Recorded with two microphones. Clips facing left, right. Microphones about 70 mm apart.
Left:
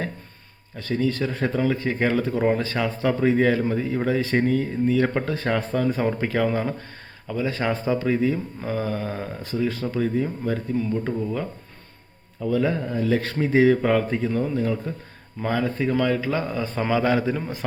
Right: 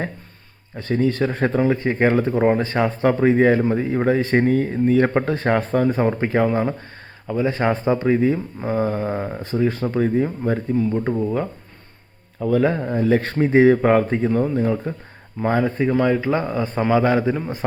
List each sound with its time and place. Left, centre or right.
0.8 s speech: right
12.4 s a man's voice: right; by 17.5 s centre